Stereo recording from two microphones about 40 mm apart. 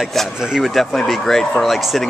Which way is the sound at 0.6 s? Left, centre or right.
Centre.